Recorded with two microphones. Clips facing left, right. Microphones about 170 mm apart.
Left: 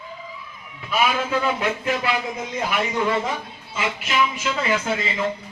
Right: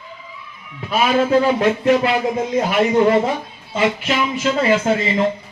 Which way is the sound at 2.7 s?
35° right (ahead or behind).